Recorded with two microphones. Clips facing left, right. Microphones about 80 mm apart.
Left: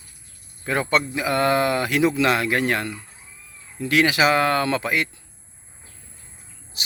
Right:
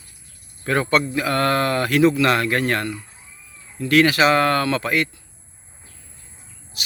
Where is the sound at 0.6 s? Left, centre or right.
Centre.